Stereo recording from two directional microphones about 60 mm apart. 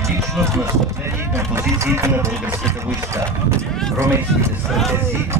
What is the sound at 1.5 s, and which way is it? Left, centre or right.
Speech, right.